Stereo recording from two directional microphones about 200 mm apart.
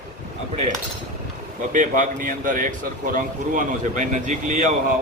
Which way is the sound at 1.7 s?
40° right (ahead or behind).